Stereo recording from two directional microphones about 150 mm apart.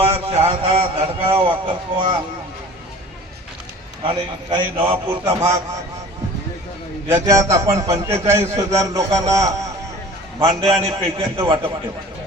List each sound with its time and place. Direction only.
0.0 s a man's voice: 40° right (ahead or behind)
4.0 s speech: 35° right (ahead or behind)
4.9 s a man's voice: 15° right (ahead or behind)
7.3 s a man's voice: 20° right (ahead or behind)
11.4 s speech: 30° right (ahead or behind)